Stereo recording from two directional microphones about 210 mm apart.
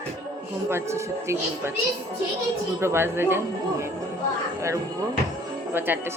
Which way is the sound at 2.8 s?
10° right (ahead or behind).